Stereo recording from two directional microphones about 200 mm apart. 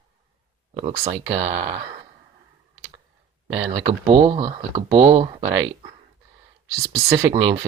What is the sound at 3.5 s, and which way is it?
Speech, 25° right (ahead or behind).